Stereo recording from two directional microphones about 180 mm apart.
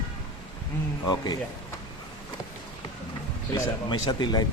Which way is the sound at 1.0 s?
20° left (ahead or behind).